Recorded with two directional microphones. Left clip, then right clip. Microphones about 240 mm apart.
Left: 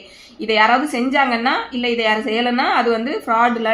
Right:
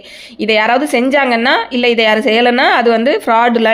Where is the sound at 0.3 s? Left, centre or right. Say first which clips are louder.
Right 3 dB; right.